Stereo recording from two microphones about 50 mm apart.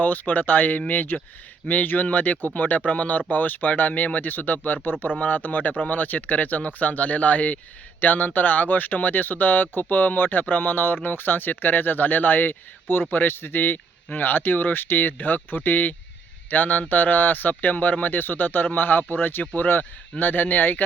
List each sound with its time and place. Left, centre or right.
0.0 s speech: left